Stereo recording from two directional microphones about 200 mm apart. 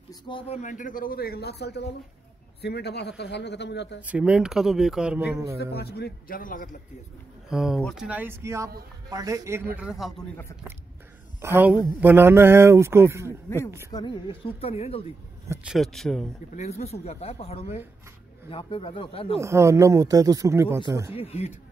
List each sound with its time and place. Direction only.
0.1 s a man's voice: 25° left (ahead or behind); by 4.0 s 60° left (ahead or behind)
4.0 s speech: 5° right (ahead or behind)
5.6 s speech: 55° left (ahead or behind)
7.4 s speech: centre (ahead or behind)
9.8 s speech: centre (ahead or behind)
11.4 s speech: 10° right (ahead or behind)
13.8 s speech: 20° left (ahead or behind)
15.4 s speech: 15° right (ahead or behind)
15.7 s speech: centre (ahead or behind)
16.5 s speech: 35° left (ahead or behind)
19.4 s speech: 15° right (ahead or behind)
21.1 s speech: 30° left (ahead or behind)